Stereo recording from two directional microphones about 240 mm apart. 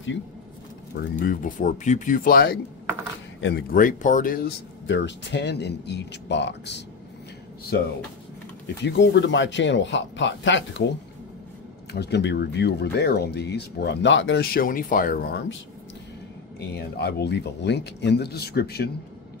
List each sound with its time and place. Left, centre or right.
0.9 s speech: left
8.8 s speech: left
11.9 s speech: left
16.7 s speech: left